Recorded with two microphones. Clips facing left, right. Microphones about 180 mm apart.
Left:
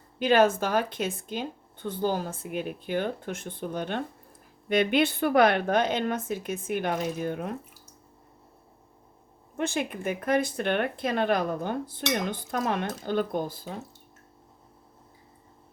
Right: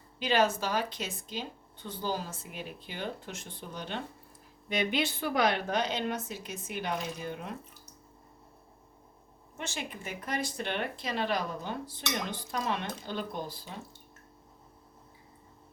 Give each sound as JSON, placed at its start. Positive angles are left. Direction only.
{"t": 0.2, "sound": "speech", "side_deg": 50}
{"t": 9.6, "sound": "speech", "side_deg": 55}